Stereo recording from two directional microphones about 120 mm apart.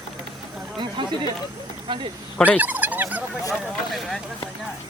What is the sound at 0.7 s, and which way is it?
Speech, 40° right (ahead or behind).